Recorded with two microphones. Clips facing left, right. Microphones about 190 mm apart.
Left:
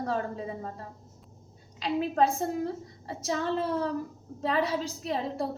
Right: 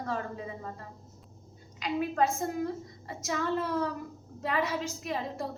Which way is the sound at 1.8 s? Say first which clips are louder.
Left 3 dB; 30° left (ahead or behind).